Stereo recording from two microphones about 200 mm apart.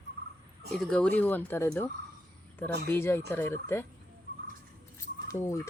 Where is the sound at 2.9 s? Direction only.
10° left (ahead or behind).